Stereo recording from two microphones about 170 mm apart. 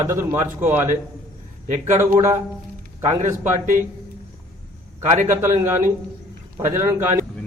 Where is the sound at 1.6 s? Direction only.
45° right (ahead or behind).